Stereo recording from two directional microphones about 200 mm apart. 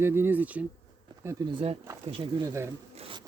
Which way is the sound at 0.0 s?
10° right (ahead or behind).